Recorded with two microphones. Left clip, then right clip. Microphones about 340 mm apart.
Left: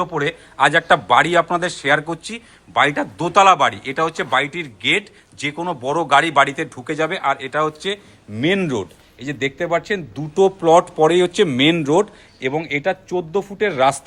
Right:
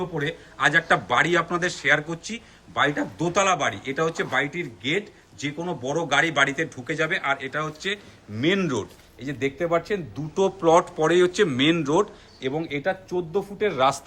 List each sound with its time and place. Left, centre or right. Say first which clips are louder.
0.2 s a man's voice: left 6 dB; centre